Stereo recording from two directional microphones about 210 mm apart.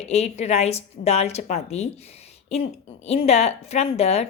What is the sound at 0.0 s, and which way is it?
A woman's voice, 30° left (ahead or behind).